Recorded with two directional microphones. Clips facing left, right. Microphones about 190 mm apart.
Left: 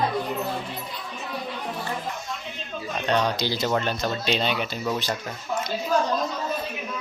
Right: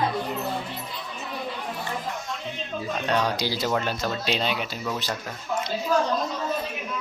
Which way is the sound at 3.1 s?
5° right (ahead or behind).